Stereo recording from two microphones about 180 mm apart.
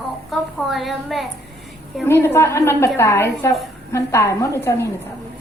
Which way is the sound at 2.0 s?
15° left (ahead or behind).